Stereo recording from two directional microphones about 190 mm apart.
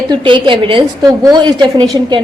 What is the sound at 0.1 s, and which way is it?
A woman's voice, 25° right (ahead or behind).